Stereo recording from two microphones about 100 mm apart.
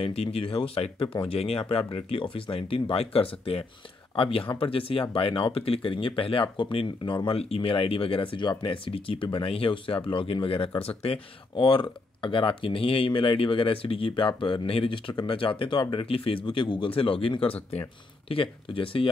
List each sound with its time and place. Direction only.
0.0 s speech: 90° left
1.1 s speech: 70° left (ahead or behind)
7.3 s speech: 80° left; by 10.7 s 60° left (ahead or behind)
10.8 s speech: 80° left
11.6 s speech: 50° left (ahead or behind)
16.4 s speech: 55° left (ahead or behind)